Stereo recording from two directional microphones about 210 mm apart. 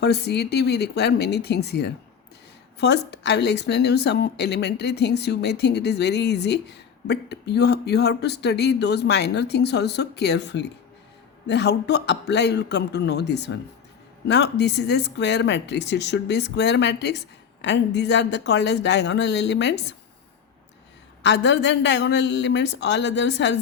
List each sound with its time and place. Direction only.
0.0 s a woman's voice: 50° left (ahead or behind)
21.2 s speech: 55° left (ahead or behind)